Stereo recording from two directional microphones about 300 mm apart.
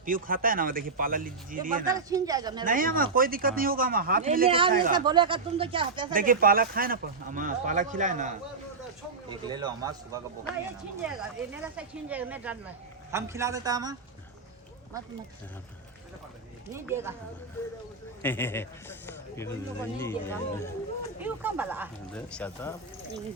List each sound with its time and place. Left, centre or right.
0.0 s speech: right
1.9 s speech: centre
2.6 s speech: right
4.9 s speech: centre
6.1 s speech: right
9.3 s speech: centre
16.7 s speech: centre
18.2 s a man's voice: centre
21.2 s speech: centre
22.1 s speech: centre